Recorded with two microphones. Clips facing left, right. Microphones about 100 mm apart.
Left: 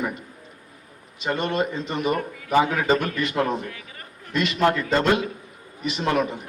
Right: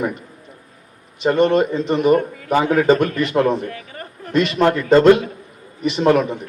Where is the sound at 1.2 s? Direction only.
40° right (ahead or behind).